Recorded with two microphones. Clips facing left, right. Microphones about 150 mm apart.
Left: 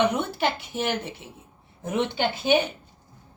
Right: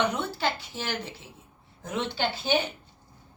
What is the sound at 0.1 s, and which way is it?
A woman's voice, 20° left (ahead or behind).